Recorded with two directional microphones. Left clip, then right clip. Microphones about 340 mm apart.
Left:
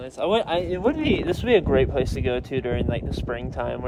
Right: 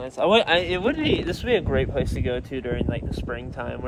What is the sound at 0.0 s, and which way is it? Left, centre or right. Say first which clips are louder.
Speech: right 4 dB; right.